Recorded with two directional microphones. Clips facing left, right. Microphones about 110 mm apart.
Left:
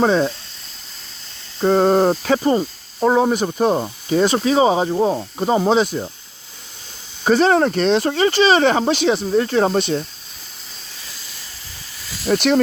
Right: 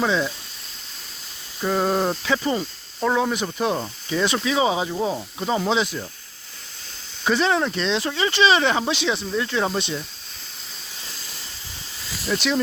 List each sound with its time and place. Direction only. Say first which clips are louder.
0.0 s speech: left 6 dB; 45° left (ahead or behind)
1.6 s speech: left 7 dB; 35° left (ahead or behind)
7.3 s speech: left 6 dB; 45° left (ahead or behind)
12.2 s speech: left 7 dB; 50° left (ahead or behind)